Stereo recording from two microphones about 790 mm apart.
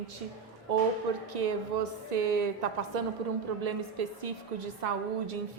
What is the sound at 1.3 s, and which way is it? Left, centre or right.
A woman's voice, right.